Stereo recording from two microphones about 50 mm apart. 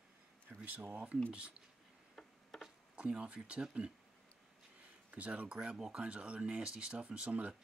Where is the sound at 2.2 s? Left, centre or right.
Centre.